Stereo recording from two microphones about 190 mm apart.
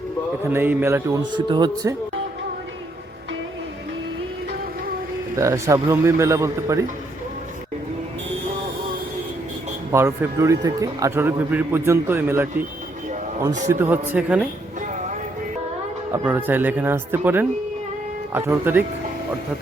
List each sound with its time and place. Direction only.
0.5 s a man's voice: 10° right (ahead or behind)
5.4 s a man's voice: 15° right (ahead or behind)
9.9 s a man's voice: 15° right (ahead or behind)
13.7 s a man's voice: 10° right (ahead or behind)
16.1 s a man's voice: 10° right (ahead or behind)